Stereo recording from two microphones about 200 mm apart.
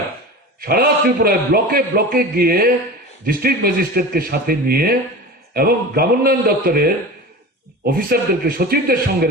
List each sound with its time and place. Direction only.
0.6 s a man's voice: 50° right (ahead or behind)